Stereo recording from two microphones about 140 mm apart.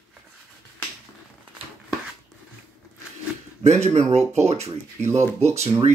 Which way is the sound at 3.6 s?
50° right (ahead or behind).